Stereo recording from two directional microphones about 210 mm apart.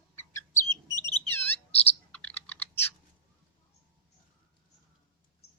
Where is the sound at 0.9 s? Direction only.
20° right (ahead or behind).